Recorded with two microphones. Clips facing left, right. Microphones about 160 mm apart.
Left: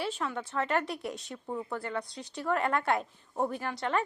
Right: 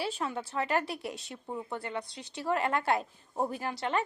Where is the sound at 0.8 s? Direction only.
5° right (ahead or behind).